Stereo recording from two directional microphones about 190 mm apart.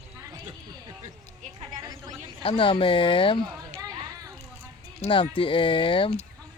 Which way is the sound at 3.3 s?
20° right (ahead or behind).